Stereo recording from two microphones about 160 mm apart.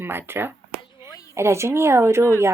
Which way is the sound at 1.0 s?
25° left (ahead or behind).